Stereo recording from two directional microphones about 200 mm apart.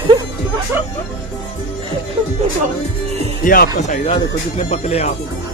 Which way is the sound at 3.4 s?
45° left (ahead or behind).